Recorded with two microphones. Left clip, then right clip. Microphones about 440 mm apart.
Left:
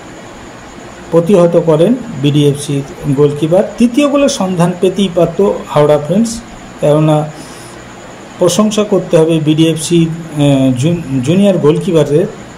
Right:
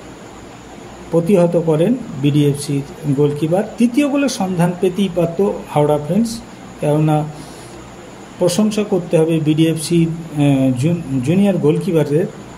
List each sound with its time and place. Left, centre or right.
1.1 s speech: right
8.5 s speech: right